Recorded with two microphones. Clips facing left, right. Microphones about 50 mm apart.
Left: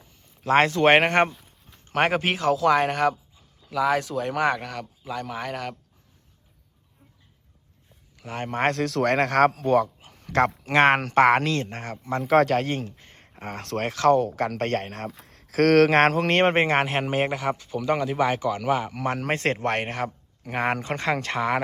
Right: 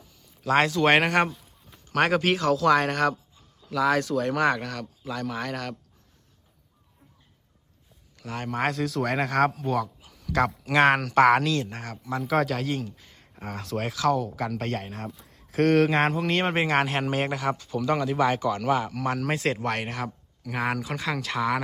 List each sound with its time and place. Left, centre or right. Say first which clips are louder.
0.1 s a man's voice: left 3 dB; left; by 5.7 s centre
8.1 s speech: left 1 dB; left
8.6 s speech: left 4 dB; left
9.6 s speech: left 6 dB; left
12.2 s speech: left 6 dB; left
16.3 s speech: left 5 dB; left
16.7 s speech: left 1 dB; left; by 18.7 s centre
18.7 s speech: left 1 dB; left